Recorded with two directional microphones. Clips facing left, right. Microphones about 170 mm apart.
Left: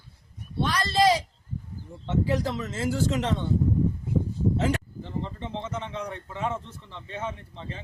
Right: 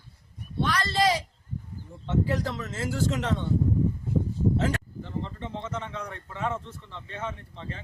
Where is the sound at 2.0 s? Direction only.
20° left (ahead or behind).